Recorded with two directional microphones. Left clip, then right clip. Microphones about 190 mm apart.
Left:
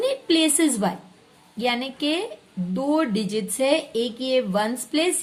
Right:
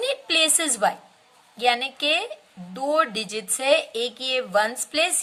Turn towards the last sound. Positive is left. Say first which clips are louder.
# even
turn(degrees=-35)  # may be behind; listen again after turning